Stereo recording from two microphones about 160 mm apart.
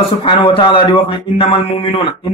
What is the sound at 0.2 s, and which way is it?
Speech, 30° left (ahead or behind).